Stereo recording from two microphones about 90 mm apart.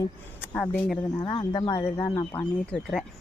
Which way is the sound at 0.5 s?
10° left (ahead or behind).